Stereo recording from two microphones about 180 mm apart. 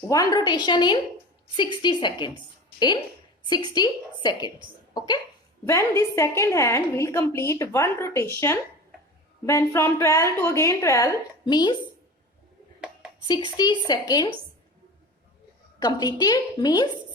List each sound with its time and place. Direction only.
0.1 s a woman's voice: 20° left (ahead or behind)
13.6 s a woman's voice: 20° left (ahead or behind)
15.8 s a woman's voice: 20° left (ahead or behind)